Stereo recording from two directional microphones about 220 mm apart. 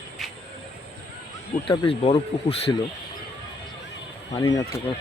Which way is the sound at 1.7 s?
25° left (ahead or behind).